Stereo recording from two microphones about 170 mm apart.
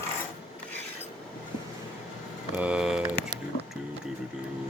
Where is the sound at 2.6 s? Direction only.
5° right (ahead or behind).